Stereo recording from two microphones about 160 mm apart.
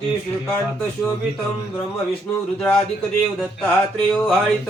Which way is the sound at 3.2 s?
Centre (ahead or behind).